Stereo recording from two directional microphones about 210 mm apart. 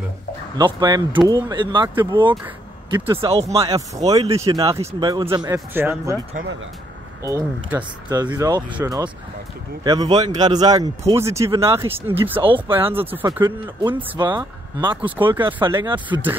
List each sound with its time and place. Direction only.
0.6 s speech: 20° right (ahead or behind)
7.2 s speech: 15° right (ahead or behind)
12.4 s speech: 25° right (ahead or behind)
12.9 s speech: 10° right (ahead or behind)
13.9 s speech: 20° right (ahead or behind)
15.0 s speech: 10° right (ahead or behind)
15.6 s speech: 20° right (ahead or behind)